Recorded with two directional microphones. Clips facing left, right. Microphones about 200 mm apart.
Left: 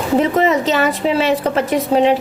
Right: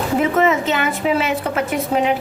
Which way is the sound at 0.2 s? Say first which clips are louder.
Left 1 dB; 35° left (ahead or behind).